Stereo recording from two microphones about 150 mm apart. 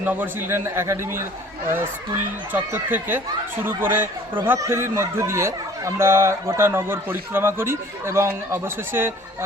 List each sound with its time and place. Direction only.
0.0 s speech: 10° right (ahead or behind)